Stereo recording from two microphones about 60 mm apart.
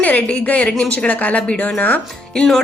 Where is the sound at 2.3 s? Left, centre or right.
Centre.